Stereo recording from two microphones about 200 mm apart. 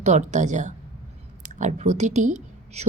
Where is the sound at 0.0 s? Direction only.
35° right (ahead or behind).